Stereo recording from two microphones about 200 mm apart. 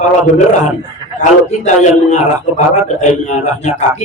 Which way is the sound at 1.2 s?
35° left (ahead or behind).